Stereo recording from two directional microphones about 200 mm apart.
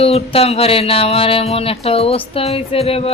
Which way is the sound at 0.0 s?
30° left (ahead or behind).